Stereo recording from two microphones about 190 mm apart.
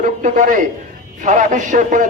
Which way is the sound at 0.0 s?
40° right (ahead or behind).